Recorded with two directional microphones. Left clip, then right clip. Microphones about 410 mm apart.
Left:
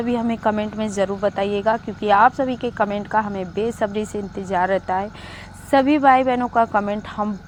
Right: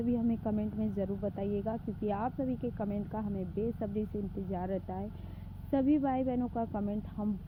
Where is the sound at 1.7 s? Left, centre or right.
Centre.